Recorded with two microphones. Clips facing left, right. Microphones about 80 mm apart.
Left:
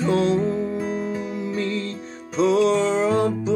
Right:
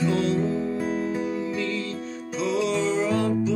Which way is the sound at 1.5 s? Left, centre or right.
Left.